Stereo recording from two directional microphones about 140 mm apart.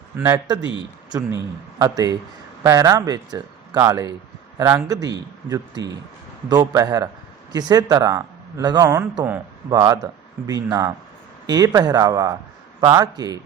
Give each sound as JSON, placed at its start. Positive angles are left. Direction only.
{"t": 0.2, "sound": "speech", "side_deg": -15}
{"t": 1.8, "sound": "speech", "side_deg": -25}